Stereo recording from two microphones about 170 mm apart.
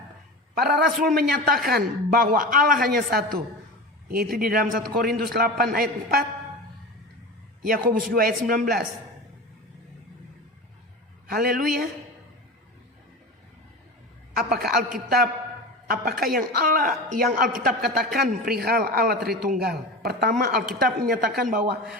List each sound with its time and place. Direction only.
0.5 s a woman's voice: 65° right (ahead or behind)
7.6 s a woman's voice: 55° right (ahead or behind)
11.3 s a woman's voice: 60° right (ahead or behind)
14.3 s a woman's voice: 65° right (ahead or behind)